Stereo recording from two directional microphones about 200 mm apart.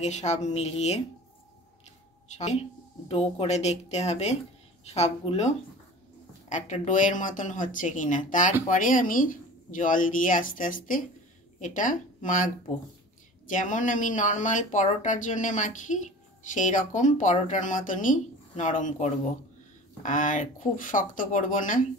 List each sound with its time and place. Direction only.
0.0 s speech: 35° left (ahead or behind)
2.2 s a woman's voice: 35° left (ahead or behind)
6.5 s speech: 40° left (ahead or behind)
13.5 s speech: 40° left (ahead or behind)